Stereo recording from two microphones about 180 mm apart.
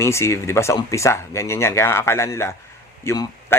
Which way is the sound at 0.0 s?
15° left (ahead or behind).